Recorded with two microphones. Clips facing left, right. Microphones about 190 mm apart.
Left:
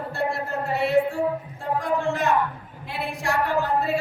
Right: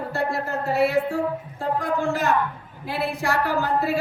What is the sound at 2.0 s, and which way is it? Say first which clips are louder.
A man's voice: even; centre (ahead or behind).